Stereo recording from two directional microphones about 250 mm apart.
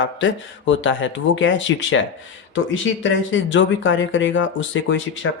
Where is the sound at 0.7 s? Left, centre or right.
Left.